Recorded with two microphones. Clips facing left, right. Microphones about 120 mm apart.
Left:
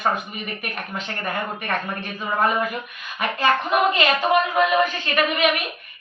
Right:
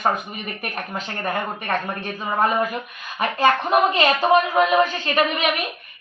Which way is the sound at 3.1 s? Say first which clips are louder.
Right 2 dB; 35° right (ahead or behind).